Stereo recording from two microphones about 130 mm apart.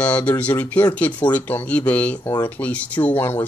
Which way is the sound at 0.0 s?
10° left (ahead or behind).